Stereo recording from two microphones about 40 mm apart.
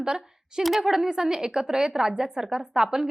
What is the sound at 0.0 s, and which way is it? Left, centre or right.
A woman's voice, centre.